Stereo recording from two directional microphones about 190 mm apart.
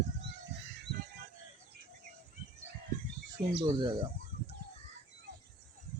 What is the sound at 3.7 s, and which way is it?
Speech, 25° right (ahead or behind).